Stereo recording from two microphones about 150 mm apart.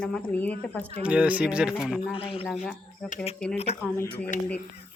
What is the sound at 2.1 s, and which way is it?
Speech, 40° left (ahead or behind).